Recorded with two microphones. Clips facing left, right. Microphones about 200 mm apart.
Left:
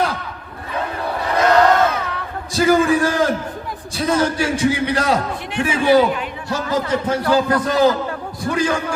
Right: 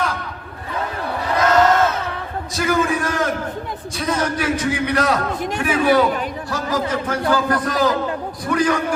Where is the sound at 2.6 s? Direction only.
30° left (ahead or behind).